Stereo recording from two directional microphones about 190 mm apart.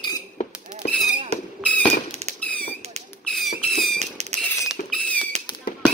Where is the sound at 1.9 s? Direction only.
35° right (ahead or behind).